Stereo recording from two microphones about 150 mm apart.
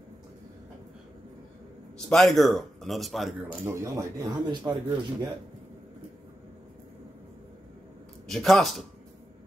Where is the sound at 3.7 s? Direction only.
20° right (ahead or behind).